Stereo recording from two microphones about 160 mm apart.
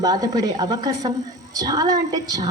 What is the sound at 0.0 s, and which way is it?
Speech, 25° right (ahead or behind).